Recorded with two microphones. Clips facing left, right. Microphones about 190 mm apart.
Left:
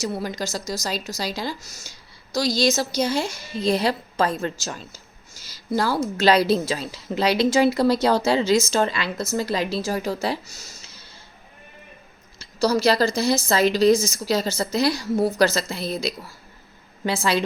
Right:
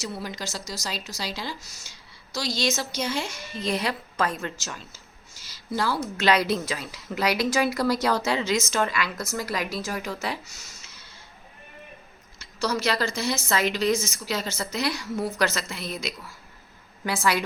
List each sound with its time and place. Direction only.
0.0 s a woman's voice: 45° left (ahead or behind)
12.4 s speech: 35° left (ahead or behind)